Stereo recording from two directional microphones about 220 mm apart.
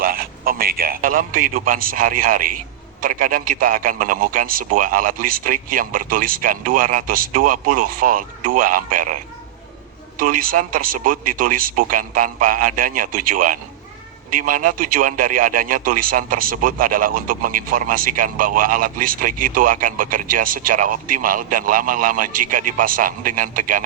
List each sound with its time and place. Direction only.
0.0 s a man's voice: 40° right (ahead or behind)
10.2 s a man's voice: 40° right (ahead or behind)